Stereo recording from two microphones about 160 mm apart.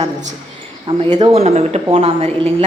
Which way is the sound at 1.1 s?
25° right (ahead or behind).